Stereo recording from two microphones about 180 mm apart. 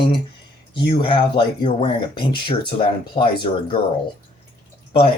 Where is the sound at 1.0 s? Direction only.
25° left (ahead or behind).